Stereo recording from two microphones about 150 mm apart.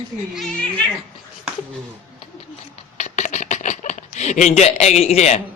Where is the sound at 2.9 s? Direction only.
50° left (ahead or behind).